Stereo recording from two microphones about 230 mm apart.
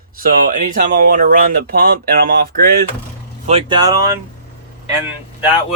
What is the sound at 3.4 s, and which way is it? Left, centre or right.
Speech, right.